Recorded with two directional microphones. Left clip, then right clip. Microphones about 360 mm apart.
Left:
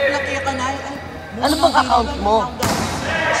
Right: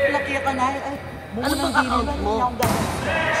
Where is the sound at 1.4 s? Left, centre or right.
Centre.